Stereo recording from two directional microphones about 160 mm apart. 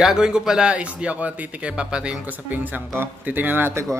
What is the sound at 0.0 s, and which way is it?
Speech, 5° right (ahead or behind).